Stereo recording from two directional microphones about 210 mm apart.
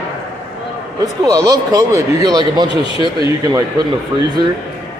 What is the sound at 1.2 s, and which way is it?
Speech, 15° right (ahead or behind).